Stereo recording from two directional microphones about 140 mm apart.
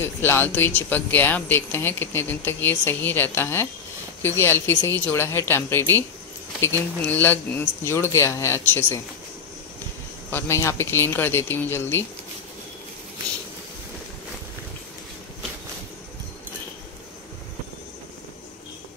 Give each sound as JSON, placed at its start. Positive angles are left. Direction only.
{"t": 0.0, "sound": "speech", "side_deg": 15}
{"t": 10.3, "sound": "speech", "side_deg": 20}